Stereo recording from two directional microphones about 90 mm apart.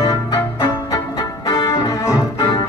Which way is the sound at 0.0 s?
50° left (ahead or behind).